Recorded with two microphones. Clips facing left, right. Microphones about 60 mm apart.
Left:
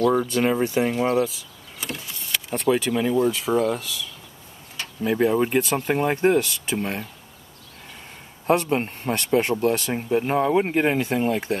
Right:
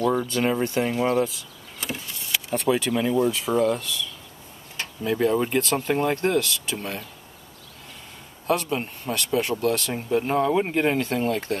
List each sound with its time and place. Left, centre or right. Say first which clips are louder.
0.3 s speech: left 2 dB; centre
8.5 s speech: left 4 dB; left
9.6 s speech: left 2 dB; centre